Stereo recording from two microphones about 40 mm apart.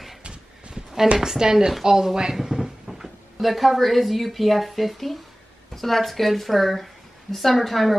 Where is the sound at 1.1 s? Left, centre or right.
Centre.